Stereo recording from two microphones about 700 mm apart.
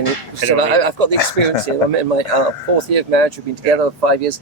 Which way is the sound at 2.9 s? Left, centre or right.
Right.